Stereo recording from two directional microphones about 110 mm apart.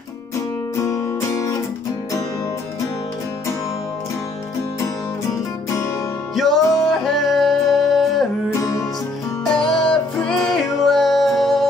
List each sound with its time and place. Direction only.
0.7 s music: 30° left (ahead or behind)
6.3 s music: centre (ahead or behind)
6.6 s music: 30° left (ahead or behind)
6.9 s music: centre (ahead or behind)
8.5 s music: 30° left (ahead or behind)
9.5 s music: 5° left (ahead or behind)